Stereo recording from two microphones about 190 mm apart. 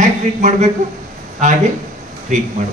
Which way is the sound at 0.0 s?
40° right (ahead or behind).